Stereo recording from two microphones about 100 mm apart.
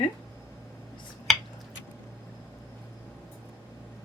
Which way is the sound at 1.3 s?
5° left (ahead or behind).